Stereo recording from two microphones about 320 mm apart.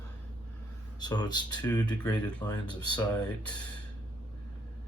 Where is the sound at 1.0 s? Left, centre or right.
Centre.